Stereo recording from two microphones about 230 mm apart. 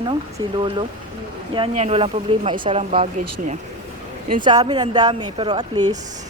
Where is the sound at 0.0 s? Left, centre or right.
Right.